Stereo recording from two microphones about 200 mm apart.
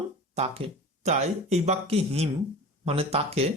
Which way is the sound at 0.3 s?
30° right (ahead or behind).